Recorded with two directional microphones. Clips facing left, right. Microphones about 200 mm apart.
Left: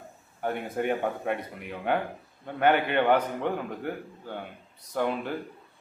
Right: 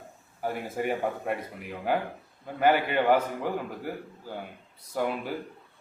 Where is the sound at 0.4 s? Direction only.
5° right (ahead or behind).